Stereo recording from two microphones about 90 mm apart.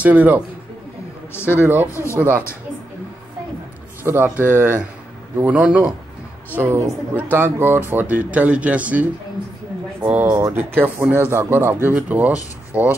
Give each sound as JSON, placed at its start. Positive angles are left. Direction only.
{"t": 0.0, "sound": "speech", "side_deg": -15}
{"t": 1.5, "sound": "speech", "side_deg": -20}
{"t": 1.9, "sound": "speech", "side_deg": 30}
{"t": 2.1, "sound": "speech", "side_deg": -25}
{"t": 4.0, "sound": "speech", "side_deg": -20}
{"t": 6.5, "sound": "speech", "side_deg": -20}
{"t": 10.3, "sound": "speech", "side_deg": -30}